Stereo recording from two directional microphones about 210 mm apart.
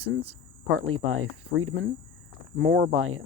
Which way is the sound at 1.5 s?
80° right.